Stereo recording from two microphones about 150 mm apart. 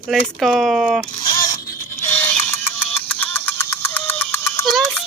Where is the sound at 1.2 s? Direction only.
25° left (ahead or behind).